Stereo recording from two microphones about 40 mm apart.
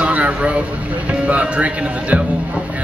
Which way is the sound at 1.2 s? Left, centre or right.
Right.